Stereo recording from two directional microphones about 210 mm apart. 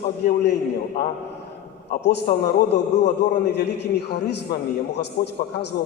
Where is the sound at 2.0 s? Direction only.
55° left (ahead or behind).